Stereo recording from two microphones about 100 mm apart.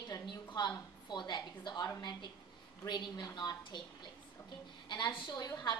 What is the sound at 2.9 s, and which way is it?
A woman's voice, 45° left (ahead or behind).